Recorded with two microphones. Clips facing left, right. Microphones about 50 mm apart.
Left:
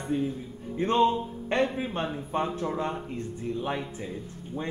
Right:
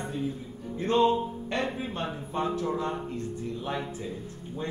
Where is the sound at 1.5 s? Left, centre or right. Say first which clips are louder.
Left 5 dB; left.